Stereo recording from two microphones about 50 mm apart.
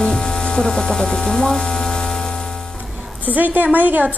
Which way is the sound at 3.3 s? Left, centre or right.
Right.